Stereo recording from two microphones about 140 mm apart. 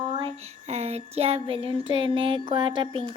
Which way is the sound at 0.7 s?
50° right (ahead or behind).